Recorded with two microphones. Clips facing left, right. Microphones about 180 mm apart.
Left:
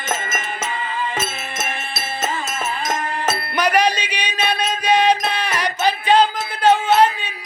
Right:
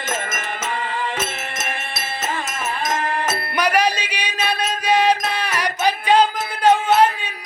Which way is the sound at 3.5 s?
10° right (ahead or behind).